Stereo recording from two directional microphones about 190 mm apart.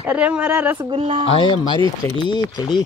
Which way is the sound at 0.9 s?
30° right (ahead or behind).